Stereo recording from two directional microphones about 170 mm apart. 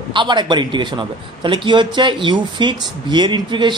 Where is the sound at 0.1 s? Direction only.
25° right (ahead or behind).